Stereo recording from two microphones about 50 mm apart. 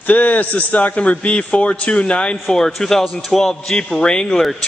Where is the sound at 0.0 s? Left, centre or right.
Left.